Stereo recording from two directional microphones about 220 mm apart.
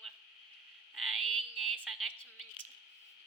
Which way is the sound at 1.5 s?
Centre (ahead or behind).